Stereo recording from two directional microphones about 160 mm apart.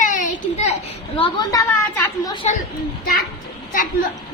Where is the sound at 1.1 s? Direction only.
35° left (ahead or behind).